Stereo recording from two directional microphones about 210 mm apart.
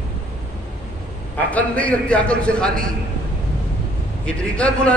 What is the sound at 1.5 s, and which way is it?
A man's voice, 5° left (ahead or behind).